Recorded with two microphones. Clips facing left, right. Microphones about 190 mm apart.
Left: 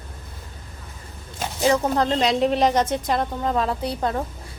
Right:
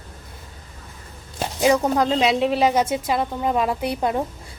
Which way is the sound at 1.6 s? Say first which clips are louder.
Right 2 dB; 10° right (ahead or behind).